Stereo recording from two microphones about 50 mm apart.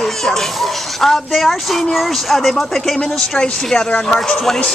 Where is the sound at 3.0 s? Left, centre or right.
Centre.